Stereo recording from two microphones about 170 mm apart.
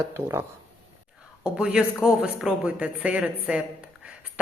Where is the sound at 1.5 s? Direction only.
5° right (ahead or behind).